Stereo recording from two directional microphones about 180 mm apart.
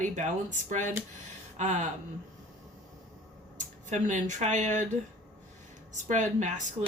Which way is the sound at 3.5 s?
45° right (ahead or behind).